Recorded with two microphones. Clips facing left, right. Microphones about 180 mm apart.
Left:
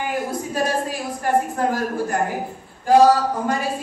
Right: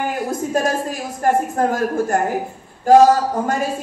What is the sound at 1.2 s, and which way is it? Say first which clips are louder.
Speech: right 3 dB; 45° right (ahead or behind).